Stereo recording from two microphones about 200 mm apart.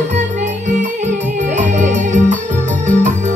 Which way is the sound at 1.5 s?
35° right (ahead or behind).